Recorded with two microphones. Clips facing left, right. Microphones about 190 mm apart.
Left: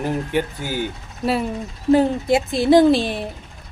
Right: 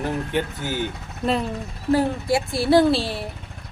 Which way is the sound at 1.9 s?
20° left (ahead or behind).